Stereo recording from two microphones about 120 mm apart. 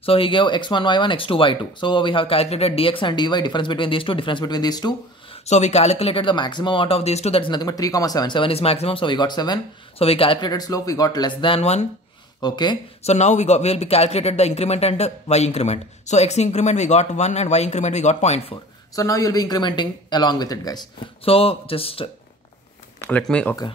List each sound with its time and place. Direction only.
0.0 s speech: 50° left (ahead or behind); by 4.9 s 35° left (ahead or behind)
5.5 s speech: 65° left (ahead or behind); by 7.6 s 45° left (ahead or behind)
7.6 s speech: 30° left (ahead or behind)
9.9 s speech: 55° left (ahead or behind)
10.5 s speech: 30° left (ahead or behind)
13.0 s speech: 70° left (ahead or behind)
18.9 s speech: 30° left (ahead or behind)
21.2 s speech: 55° left (ahead or behind)
22.9 s speech: 10° left (ahead or behind)